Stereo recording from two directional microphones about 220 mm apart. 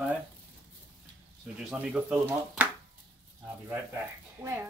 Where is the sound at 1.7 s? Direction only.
5° right (ahead or behind).